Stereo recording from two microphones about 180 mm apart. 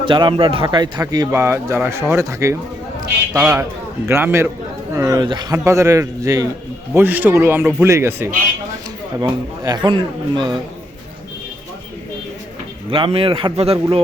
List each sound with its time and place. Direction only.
0.0 s a man's voice: 25° right (ahead or behind)
12.9 s speech: 30° right (ahead or behind)